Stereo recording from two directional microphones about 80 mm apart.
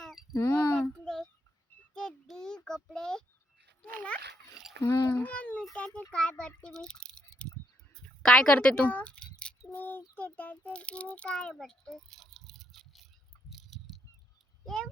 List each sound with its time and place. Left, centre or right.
0.0 s a sound: centre
0.3 s speech: left
1.9 s child singing: centre
2.6 s a child's voice: centre
3.8 s dog: centre
4.8 s a child's voice: left
5.2 s a sound: centre
10.2 s a child's voice: centre
11.6 s a sound: centre